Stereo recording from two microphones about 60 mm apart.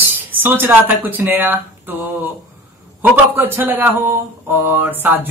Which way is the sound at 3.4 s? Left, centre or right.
Right.